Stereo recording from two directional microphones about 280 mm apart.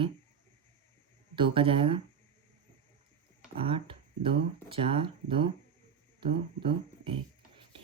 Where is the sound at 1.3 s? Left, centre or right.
Centre.